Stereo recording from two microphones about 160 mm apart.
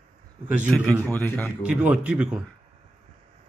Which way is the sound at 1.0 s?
5° left (ahead or behind).